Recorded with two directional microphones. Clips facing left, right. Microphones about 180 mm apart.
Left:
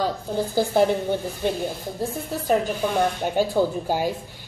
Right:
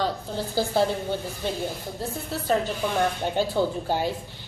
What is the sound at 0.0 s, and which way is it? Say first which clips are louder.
Speech: left 3 dB; 15° left (ahead or behind).